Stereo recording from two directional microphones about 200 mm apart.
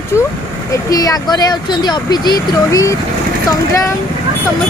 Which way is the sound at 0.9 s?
20° left (ahead or behind).